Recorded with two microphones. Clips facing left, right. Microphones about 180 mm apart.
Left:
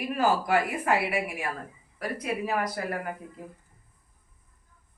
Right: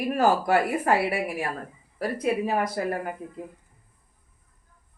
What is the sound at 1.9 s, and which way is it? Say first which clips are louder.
Speech: right 6 dB; 30° right (ahead or behind).